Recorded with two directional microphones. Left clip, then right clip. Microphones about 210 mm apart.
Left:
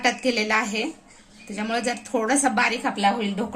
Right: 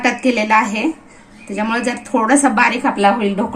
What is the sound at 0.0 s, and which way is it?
A woman's voice, 45° left (ahead or behind).